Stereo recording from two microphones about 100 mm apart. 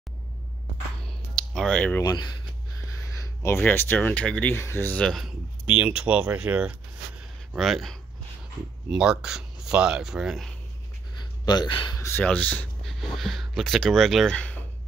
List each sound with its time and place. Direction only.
1.0 s music: 5° left (ahead or behind)
2.0 s speech: 45° left (ahead or behind)
3.0 s speech: 30° left (ahead or behind)
5.0 s speech: centre (ahead or behind)
5.8 s speech: 10° right (ahead or behind)
7.5 s speech: centre (ahead or behind)
11.4 s speech: 45° left (ahead or behind)
12.2 s speech: 15° left (ahead or behind)
12.8 s speech: centre (ahead or behind)